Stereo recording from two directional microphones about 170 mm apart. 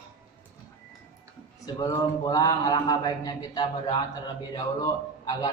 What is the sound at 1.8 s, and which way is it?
A man's voice, 20° left (ahead or behind).